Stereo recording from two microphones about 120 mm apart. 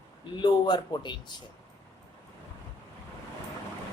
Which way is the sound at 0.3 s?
40° left (ahead or behind).